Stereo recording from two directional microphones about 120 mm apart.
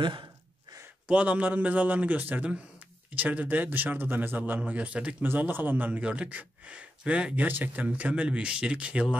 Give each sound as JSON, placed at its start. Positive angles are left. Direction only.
{"t": 0.0, "sound": "speech", "side_deg": -40}
{"t": 1.0, "sound": "speech", "side_deg": -10}